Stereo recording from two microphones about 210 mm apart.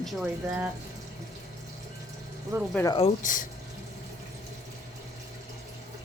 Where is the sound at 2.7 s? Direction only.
15° left (ahead or behind).